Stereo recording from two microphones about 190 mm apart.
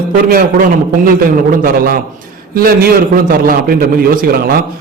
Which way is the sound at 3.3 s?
50° right (ahead or behind).